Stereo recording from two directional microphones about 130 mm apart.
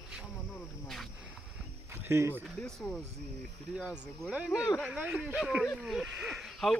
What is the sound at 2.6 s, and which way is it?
Speech, 5° left (ahead or behind).